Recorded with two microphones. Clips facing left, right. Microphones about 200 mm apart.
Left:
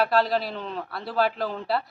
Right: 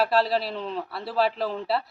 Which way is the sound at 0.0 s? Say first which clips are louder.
Even; centre (ahead or behind).